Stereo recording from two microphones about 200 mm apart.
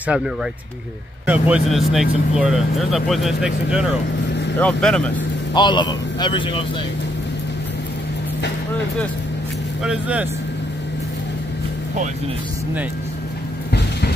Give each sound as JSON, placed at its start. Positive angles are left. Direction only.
{"t": 0.0, "sound": "speech", "side_deg": -5}
{"t": 5.5, "sound": "speech", "side_deg": 20}
{"t": 9.8, "sound": "speech", "side_deg": -5}